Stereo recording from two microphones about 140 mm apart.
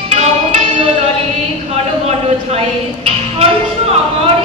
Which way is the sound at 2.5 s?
45° right (ahead or behind).